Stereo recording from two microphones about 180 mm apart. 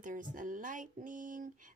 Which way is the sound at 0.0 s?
50° right (ahead or behind).